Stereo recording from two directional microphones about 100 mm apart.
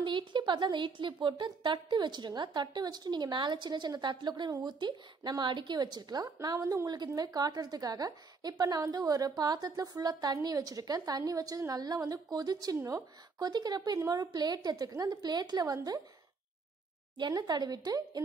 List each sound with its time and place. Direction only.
0.0 s a woman's voice: 55° right (ahead or behind); by 16.0 s 35° right (ahead or behind)
17.2 s a woman's voice: 45° right (ahead or behind)